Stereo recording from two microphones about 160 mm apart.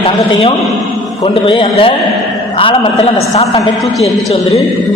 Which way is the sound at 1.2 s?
35° left (ahead or behind).